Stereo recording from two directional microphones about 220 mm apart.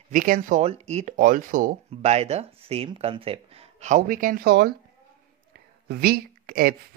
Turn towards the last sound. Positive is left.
turn(degrees=-45)  # may be behind; listen again after turning